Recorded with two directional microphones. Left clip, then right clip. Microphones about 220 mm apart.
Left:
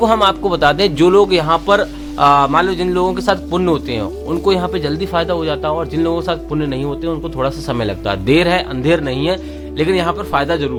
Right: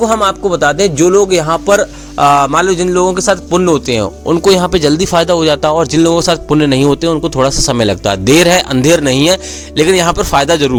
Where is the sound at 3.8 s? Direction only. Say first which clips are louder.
Right 7 dB; 40° right (ahead or behind).